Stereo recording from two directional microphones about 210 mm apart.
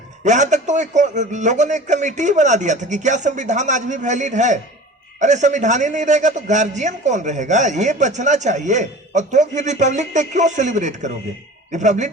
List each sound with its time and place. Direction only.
0.3 s a man's voice: 35° right (ahead or behind)